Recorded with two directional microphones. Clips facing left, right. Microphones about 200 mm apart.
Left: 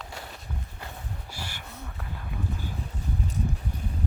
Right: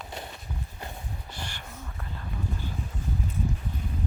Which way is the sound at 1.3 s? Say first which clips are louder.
Right 1 dB; 10° left (ahead or behind).